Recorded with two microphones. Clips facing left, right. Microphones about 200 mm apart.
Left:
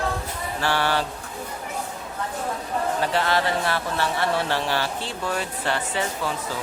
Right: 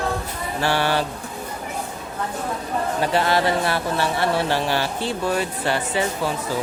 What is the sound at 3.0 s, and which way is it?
Speech, 10° right (ahead or behind).